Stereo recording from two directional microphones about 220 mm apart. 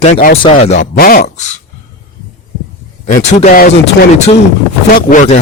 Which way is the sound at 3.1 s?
30° left (ahead or behind).